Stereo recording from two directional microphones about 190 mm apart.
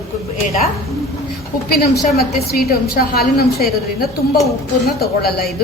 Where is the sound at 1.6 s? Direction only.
55° left (ahead or behind).